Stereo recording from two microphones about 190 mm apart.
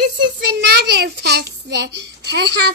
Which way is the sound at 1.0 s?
60° right (ahead or behind).